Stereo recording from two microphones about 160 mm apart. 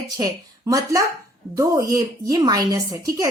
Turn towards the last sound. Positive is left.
turn(degrees=-20)  # may be behind; listen again after turning